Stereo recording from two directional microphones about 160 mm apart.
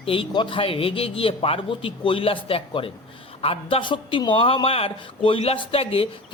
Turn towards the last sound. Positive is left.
turn(degrees=35)  # may be behind; listen again after turning